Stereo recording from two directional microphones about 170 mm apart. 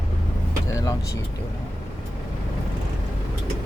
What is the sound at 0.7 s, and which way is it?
Vehicle, 20° left (ahead or behind).